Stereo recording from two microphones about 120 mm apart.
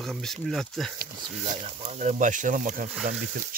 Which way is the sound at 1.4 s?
70° right (ahead or behind).